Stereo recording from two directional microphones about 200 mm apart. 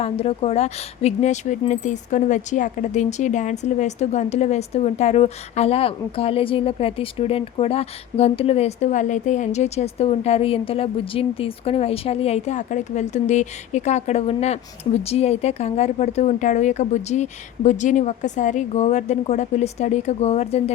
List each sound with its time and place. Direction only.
0.0 s speech: 30° left (ahead or behind)